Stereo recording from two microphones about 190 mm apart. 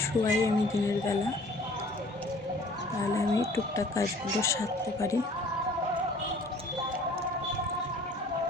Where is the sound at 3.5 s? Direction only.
15° left (ahead or behind).